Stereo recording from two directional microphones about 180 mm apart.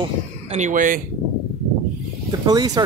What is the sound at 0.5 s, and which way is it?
Speech, 45° right (ahead or behind).